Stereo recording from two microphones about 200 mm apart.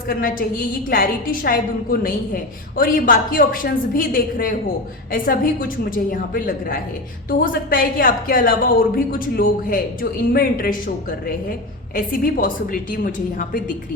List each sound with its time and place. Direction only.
0.1 s a woman's voice: 45° left (ahead or behind)